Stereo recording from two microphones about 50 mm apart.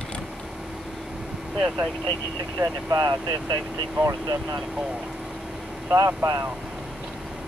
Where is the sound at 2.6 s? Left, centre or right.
Right.